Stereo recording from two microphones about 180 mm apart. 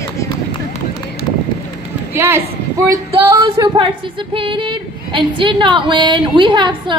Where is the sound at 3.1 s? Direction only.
30° right (ahead or behind).